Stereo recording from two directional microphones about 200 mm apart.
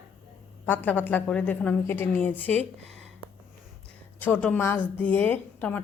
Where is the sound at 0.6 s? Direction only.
10° left (ahead or behind).